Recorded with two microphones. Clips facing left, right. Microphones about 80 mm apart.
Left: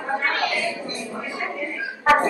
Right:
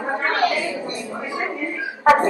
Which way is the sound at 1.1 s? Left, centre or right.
Centre.